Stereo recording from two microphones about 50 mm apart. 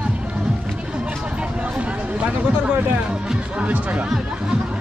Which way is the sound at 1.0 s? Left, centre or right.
Right.